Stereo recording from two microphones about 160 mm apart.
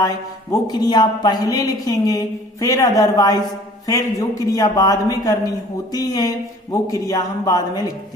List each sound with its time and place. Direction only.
0.5 s a man's voice: 25° left (ahead or behind)